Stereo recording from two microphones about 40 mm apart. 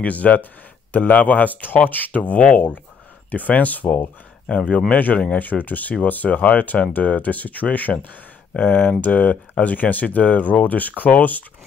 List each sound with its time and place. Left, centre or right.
0.0 s speech: left
4.6 s speech: left
5.7 s speech: left
8.5 s speech: left